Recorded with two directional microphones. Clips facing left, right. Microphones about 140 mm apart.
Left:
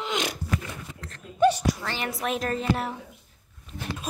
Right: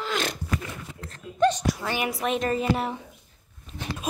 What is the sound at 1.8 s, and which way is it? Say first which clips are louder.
Speech: right 4 dB; 10° right (ahead or behind).